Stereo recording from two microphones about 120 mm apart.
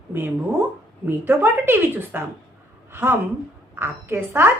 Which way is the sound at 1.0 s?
20° right (ahead or behind).